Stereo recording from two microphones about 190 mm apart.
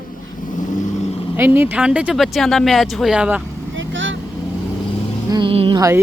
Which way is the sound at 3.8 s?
80° right.